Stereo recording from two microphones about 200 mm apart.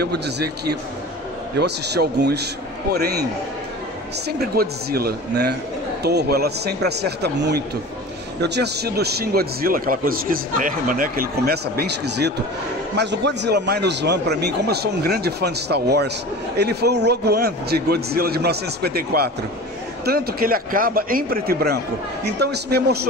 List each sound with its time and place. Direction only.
0.0 s a man's voice: 55° right (ahead or behind)
4.3 s a man's voice: 50° right (ahead or behind)